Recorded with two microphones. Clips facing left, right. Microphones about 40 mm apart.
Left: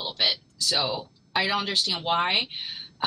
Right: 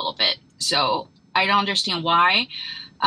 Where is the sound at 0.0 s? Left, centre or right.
Right.